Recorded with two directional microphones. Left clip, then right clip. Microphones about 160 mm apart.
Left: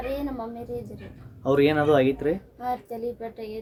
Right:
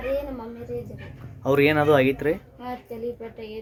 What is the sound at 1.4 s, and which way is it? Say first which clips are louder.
Speech: right 1 dB; centre (ahead or behind).